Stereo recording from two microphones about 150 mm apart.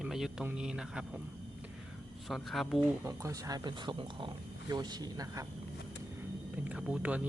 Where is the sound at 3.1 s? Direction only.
20° right (ahead or behind).